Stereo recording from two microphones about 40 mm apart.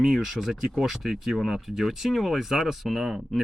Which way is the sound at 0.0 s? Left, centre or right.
Centre.